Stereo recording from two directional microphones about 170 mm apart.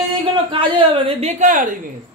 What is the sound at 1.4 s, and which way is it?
Speech, 50° right (ahead or behind).